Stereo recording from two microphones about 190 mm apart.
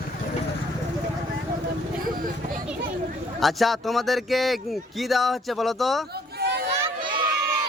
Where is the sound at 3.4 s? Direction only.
Centre (ahead or behind).